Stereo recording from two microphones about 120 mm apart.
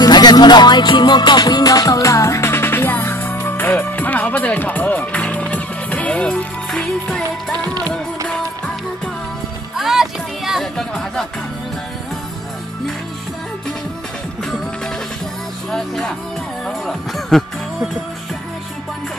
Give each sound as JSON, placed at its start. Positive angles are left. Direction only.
{"t": 0.0, "sound": "music", "side_deg": 35}
{"t": 7.2, "sound": "music", "side_deg": -35}
{"t": 8.3, "sound": "music", "side_deg": 5}
{"t": 15.7, "sound": "music", "side_deg": 5}